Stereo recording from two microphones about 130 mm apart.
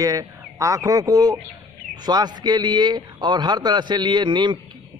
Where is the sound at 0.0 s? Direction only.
25° right (ahead or behind).